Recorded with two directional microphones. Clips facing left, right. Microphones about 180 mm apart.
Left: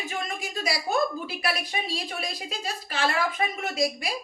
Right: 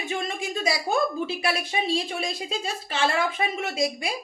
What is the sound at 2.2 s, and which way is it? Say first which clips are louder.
Speech: right 4 dB; 25° right (ahead or behind).